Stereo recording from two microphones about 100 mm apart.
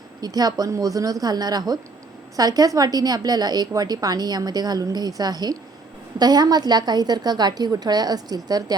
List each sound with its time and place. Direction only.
0.2 s a woman's voice: 40° right (ahead or behind)